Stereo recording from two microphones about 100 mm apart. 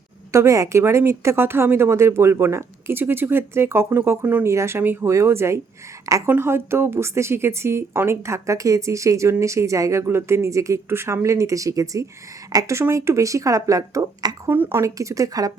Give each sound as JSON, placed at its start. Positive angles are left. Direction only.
{"t": 0.3, "sound": "a woman's voice", "side_deg": -30}
{"t": 14.5, "sound": "speech", "side_deg": -20}